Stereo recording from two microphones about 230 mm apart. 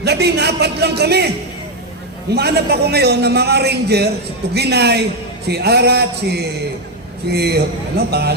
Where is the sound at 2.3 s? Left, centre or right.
Right.